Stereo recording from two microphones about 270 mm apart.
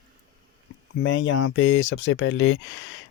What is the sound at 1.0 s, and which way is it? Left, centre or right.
Speech, left.